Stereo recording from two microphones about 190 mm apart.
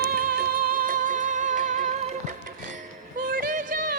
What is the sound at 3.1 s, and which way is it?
Music, 50° right (ahead or behind).